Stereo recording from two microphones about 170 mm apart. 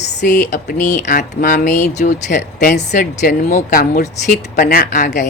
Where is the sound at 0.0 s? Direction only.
85° left.